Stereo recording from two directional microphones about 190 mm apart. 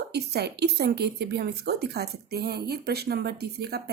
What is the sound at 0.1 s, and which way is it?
A woman's voice, 60° right (ahead or behind).